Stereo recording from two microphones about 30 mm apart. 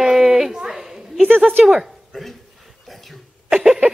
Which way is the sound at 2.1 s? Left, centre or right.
Centre.